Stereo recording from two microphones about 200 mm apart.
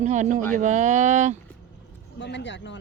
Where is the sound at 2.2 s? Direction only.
60° left (ahead or behind).